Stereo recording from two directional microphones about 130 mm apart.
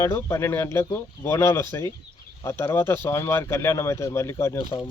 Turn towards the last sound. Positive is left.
turn(degrees=20)  # may be behind; listen again after turning